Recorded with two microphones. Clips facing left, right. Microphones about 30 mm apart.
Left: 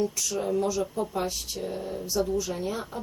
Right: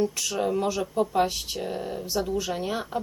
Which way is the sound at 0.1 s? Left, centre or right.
Right.